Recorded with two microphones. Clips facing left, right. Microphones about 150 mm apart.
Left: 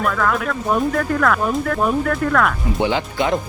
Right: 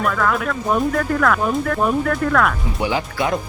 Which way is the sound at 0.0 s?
Centre (ahead or behind).